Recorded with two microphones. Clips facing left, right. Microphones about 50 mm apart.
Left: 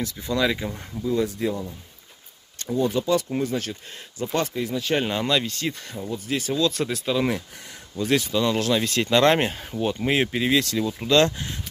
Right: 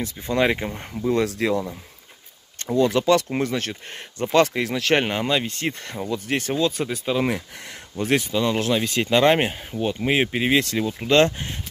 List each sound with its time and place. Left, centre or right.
0.0 s speech: right
1.0 s speech: right
3.3 s speech: right
4.3 s speech: right
5.2 s speech: right
5.5 s speech: right
6.7 s speech: centre
8.0 s speech: right
8.3 s speech: centre